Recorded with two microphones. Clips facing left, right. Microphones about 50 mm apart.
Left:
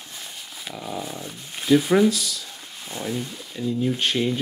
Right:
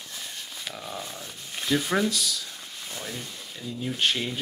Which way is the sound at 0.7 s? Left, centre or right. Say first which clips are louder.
Left 6 dB; centre.